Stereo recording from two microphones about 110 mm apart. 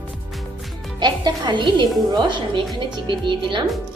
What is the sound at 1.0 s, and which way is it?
A woman's voice, 40° right (ahead or behind).